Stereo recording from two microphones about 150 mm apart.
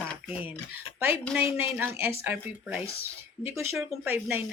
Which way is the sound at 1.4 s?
15° right (ahead or behind).